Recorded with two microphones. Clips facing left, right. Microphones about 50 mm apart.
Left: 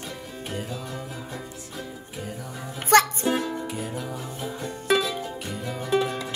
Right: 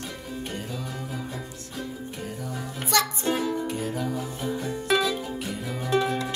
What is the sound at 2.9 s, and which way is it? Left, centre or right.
Music, left.